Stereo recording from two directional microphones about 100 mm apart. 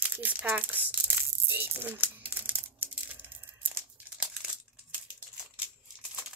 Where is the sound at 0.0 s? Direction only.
15° right (ahead or behind).